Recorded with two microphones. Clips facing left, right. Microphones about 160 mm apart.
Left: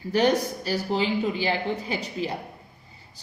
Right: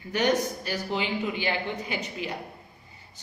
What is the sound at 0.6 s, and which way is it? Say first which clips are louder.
Speech: left 4 dB; 35° left (ahead or behind).